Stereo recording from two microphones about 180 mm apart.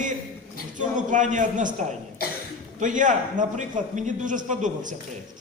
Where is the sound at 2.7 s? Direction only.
45° right (ahead or behind).